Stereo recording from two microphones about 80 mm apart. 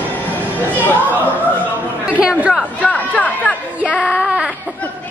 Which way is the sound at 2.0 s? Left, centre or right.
Centre.